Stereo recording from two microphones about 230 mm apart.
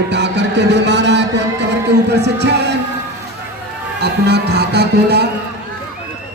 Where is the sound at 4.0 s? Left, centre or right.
Right.